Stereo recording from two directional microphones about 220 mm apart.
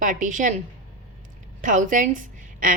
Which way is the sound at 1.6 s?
35° right (ahead or behind).